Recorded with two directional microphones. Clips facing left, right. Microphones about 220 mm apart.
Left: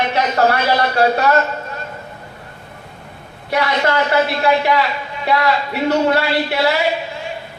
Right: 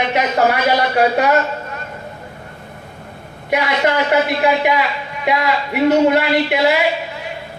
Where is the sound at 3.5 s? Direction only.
15° right (ahead or behind).